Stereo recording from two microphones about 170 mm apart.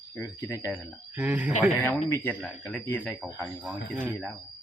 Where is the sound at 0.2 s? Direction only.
15° left (ahead or behind).